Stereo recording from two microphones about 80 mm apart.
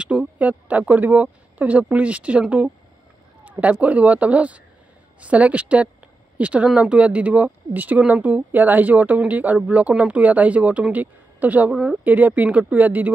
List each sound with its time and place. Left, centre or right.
0.0 s speech: centre
11.7 s speech: centre
12.0 s speech: right